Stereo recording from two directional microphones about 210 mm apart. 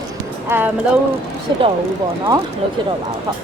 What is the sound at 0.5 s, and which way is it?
Speech, 10° right (ahead or behind).